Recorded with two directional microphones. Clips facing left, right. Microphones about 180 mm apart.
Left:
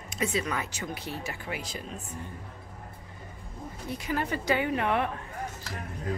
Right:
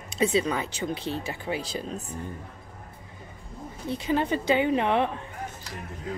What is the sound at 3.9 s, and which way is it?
Speech, 25° right (ahead or behind).